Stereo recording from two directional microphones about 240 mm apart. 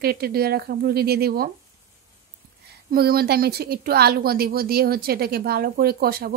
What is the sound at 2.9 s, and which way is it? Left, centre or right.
A woman's voice, right.